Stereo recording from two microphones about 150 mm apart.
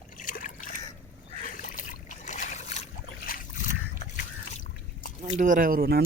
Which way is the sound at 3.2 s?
65° left (ahead or behind).